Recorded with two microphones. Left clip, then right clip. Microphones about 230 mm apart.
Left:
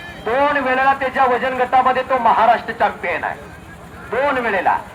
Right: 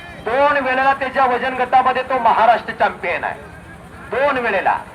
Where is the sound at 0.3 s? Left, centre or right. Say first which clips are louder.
Right 1 dB; right.